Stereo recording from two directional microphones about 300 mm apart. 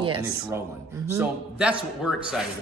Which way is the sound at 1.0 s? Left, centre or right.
Centre.